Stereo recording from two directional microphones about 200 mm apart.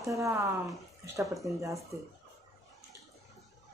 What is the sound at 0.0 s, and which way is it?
Speech, 15° right (ahead or behind).